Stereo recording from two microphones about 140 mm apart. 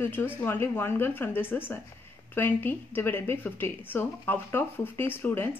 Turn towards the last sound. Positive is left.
turn(degrees=15)  # may be behind; listen again after turning